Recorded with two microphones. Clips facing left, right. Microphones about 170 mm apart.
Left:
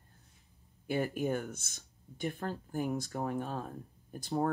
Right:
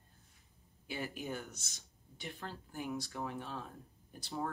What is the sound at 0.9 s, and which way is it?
Speech, 50° left (ahead or behind).